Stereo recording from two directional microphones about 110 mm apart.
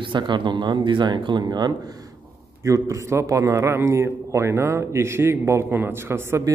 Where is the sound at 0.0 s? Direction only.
45° right (ahead or behind).